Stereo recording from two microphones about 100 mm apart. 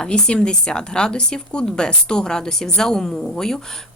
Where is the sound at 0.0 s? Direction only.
10° left (ahead or behind).